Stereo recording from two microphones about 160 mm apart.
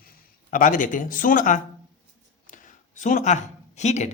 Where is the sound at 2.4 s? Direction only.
55° left (ahead or behind).